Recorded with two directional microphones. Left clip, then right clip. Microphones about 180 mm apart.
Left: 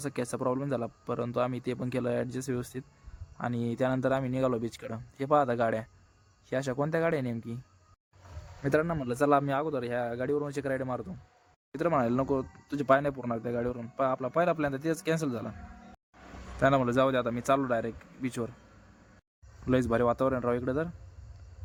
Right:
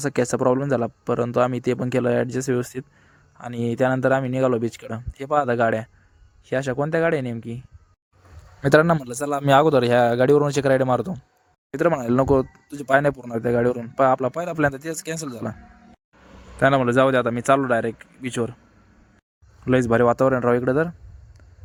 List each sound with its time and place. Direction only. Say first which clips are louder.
0.0 s a man's voice: right 12 dB; 40° right (ahead or behind); by 7.6 s 25° right (ahead or behind)
8.6 s speech: right 12 dB; 60° right (ahead or behind)
9.0 s a man's voice: even; centre (ahead or behind)
9.5 s speech: right 15 dB; 70° right (ahead or behind)
11.7 s a man's voice: right 7 dB; 40° right (ahead or behind)
12.6 s speech: even; centre (ahead or behind)
12.9 s a man's voice: right 7 dB; 45° right (ahead or behind)
16.6 s a man's voice: right 8 dB; 30° right (ahead or behind)
19.6 s a man's voice: right 9 dB; 35° right (ahead or behind)